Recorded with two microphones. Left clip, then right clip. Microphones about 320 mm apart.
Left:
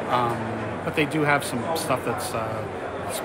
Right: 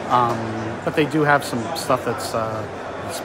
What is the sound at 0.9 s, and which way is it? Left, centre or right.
Speech, centre.